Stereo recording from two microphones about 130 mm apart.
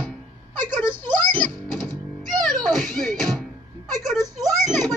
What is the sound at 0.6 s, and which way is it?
Speech, 15° left (ahead or behind).